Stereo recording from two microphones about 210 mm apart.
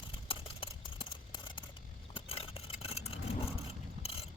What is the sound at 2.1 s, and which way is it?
Vehicle, 25° left (ahead or behind).